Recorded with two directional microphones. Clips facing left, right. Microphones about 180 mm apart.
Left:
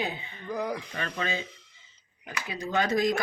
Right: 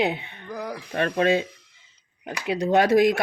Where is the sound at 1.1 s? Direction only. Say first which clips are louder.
Right 13 dB; 70° right (ahead or behind).